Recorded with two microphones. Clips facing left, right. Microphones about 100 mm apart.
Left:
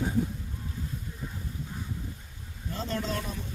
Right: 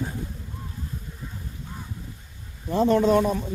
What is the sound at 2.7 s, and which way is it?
Speech, 60° right (ahead or behind).